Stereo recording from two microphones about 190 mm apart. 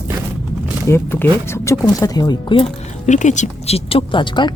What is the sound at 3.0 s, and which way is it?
Speech, 40° left (ahead or behind).